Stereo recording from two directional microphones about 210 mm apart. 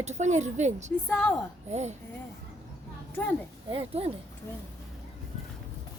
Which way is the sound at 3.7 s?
25° right (ahead or behind).